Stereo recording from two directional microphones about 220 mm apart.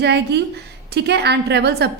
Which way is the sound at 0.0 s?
50° right (ahead or behind).